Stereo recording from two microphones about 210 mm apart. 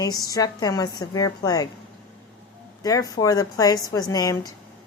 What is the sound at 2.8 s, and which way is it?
A woman's voice, 15° left (ahead or behind).